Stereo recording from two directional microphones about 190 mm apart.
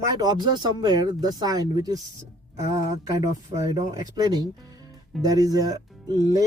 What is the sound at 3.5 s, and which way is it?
Speech, 20° right (ahead or behind).